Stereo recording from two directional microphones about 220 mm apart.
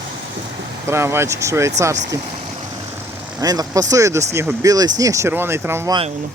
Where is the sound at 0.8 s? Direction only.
10° right (ahead or behind).